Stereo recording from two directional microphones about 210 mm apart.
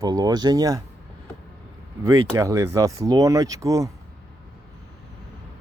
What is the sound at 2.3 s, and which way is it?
Speech, 15° right (ahead or behind).